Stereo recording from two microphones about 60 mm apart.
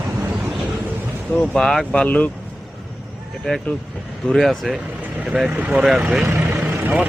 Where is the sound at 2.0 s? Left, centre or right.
Left.